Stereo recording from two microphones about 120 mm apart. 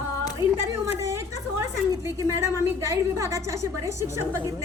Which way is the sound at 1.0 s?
25° right (ahead or behind).